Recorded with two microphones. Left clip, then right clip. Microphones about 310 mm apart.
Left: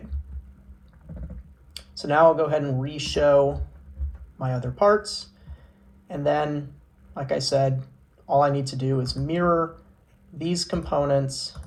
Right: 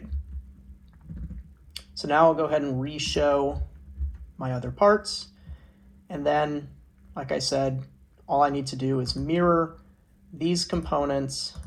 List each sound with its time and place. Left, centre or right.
1.7 s speech: centre